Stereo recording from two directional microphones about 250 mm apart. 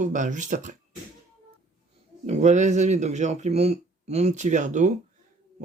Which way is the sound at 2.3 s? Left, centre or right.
Right.